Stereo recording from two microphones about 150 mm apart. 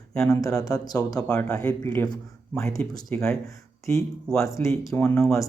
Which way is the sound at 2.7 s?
20° left (ahead or behind).